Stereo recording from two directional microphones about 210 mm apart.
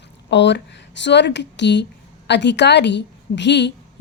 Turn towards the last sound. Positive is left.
turn(degrees=55)  # may be behind; listen again after turning